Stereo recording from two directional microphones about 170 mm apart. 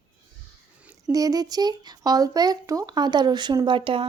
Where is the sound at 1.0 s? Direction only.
20° right (ahead or behind).